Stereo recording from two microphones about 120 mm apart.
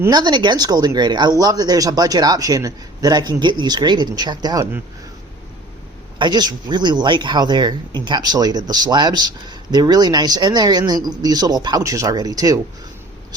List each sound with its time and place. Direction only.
0.1 s speech: 40° right (ahead or behind)
6.1 s speech: 35° right (ahead or behind)